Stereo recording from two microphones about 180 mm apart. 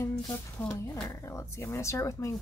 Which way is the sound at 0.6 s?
10° left (ahead or behind).